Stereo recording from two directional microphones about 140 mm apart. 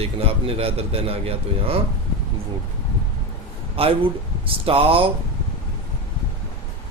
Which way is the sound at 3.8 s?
40° right (ahead or behind).